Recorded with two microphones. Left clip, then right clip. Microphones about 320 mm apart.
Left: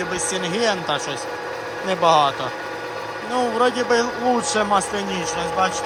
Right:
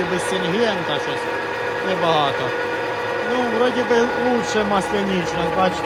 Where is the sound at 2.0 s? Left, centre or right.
Centre.